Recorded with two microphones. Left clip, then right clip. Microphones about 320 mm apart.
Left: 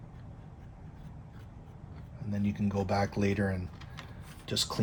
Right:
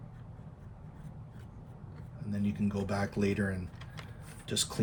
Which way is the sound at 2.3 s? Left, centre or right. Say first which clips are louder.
Left 1 dB; centre.